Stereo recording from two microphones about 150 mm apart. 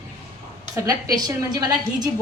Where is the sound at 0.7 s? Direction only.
25° right (ahead or behind).